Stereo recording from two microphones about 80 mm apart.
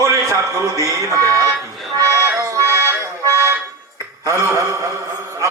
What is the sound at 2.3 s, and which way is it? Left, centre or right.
Accordion, right.